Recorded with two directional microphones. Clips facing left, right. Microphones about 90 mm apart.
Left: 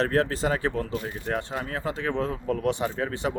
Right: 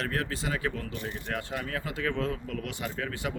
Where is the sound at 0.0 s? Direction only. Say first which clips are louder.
Left 8 dB; 35° left (ahead or behind).